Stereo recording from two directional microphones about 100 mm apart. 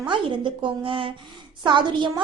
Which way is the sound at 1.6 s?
50° right (ahead or behind).